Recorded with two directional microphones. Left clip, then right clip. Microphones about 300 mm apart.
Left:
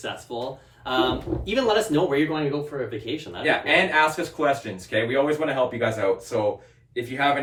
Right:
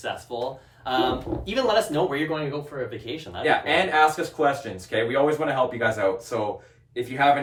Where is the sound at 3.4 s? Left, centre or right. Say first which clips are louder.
Left 1 dB; centre.